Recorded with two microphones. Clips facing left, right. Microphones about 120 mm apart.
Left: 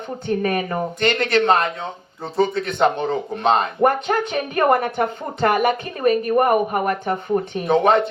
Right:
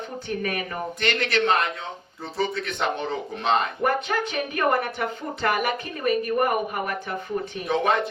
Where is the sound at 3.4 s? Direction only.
30° left (ahead or behind).